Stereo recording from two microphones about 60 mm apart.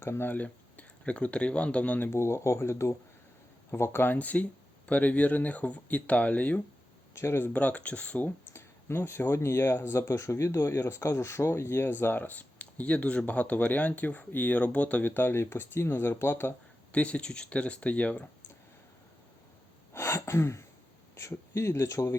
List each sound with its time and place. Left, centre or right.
0.0 s speech: left
0.3 s speech: left
2.1 s speech: left
7.2 s speech: left
7.5 s speech: left
8.5 s speech: left
15.1 s speech: left
16.9 s speech: left
19.9 s a sound: left
21.2 s speech: left